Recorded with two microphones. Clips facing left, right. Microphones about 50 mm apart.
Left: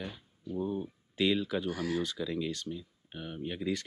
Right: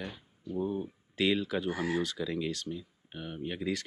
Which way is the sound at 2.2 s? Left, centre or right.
Right.